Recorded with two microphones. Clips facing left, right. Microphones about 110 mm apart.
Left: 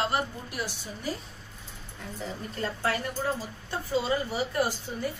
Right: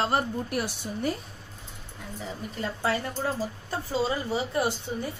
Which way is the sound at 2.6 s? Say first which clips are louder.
Right 1 dB; 25° right (ahead or behind).